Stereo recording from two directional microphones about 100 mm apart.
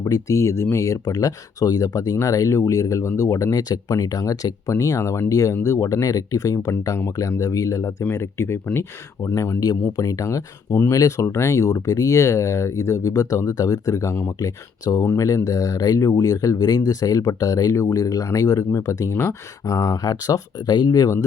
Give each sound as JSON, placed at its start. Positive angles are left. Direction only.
{"t": 0.0, "sound": "speech", "side_deg": 35}